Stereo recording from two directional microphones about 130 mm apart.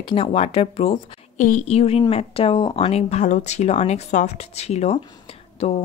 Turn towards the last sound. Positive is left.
turn(degrees=50)  # may be behind; listen again after turning